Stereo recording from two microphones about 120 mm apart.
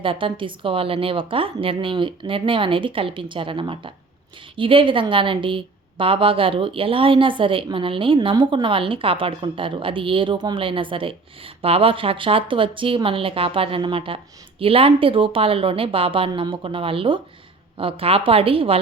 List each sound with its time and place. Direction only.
0.0 s a woman's voice: 45° right (ahead or behind)